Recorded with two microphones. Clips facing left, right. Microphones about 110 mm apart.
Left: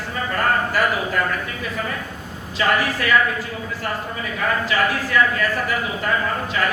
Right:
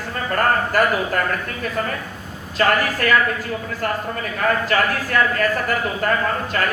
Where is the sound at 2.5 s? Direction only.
45° right (ahead or behind).